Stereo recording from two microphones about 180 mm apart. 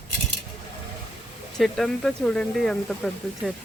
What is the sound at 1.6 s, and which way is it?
Speech, centre (ahead or behind).